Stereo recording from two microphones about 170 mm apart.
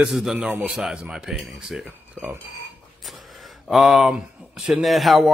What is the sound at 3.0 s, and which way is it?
A man's voice, centre (ahead or behind).